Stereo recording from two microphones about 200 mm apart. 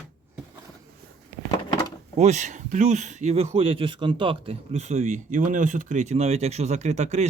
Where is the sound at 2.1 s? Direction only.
35° right (ahead or behind).